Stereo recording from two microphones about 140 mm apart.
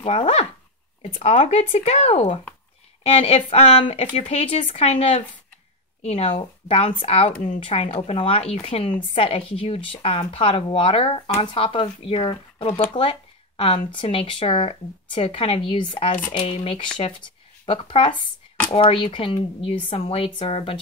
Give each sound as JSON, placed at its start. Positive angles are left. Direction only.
{"t": 0.0, "sound": "a woman's voice", "side_deg": 45}